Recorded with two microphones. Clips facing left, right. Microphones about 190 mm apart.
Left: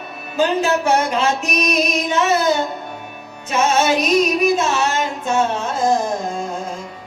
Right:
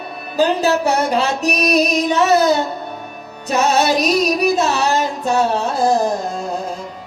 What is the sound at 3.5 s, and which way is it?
Music, 35° right (ahead or behind).